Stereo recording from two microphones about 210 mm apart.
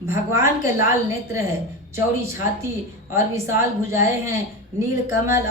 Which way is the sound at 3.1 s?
15° right (ahead or behind).